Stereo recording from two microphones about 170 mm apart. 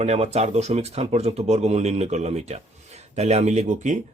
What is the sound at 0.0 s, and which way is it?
Speech, 40° right (ahead or behind).